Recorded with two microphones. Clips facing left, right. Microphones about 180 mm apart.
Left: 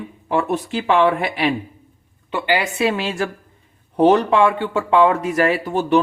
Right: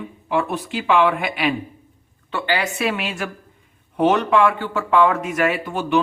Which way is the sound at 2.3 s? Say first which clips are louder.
Left 2 dB; 15° left (ahead or behind).